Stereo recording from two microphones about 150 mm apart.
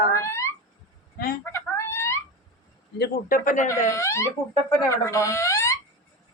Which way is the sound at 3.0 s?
85° left.